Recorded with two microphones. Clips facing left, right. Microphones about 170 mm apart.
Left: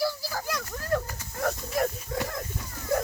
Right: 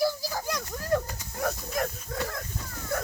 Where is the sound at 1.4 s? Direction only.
5° left (ahead or behind).